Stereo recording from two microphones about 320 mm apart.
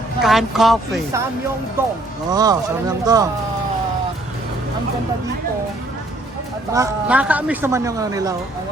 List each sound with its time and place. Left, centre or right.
0.2 s a woman's voice: centre
2.3 s speech: centre
6.7 s speech: centre